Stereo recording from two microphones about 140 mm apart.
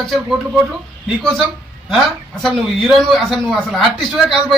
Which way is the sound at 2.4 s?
Centre (ahead or behind).